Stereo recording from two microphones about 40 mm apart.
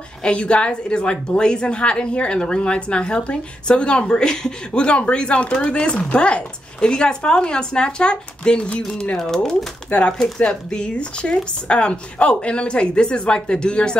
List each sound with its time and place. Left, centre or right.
0.2 s a woman's voice: left
9.9 s speech: left
10.5 s a woman's voice: left